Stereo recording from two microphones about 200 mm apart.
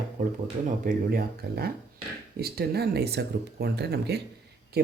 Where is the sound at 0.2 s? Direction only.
40° right (ahead or behind).